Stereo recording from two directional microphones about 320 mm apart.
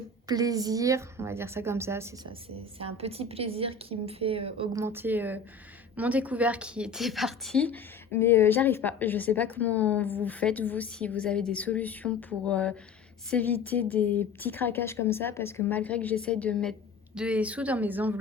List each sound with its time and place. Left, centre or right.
0.3 s a woman's voice: centre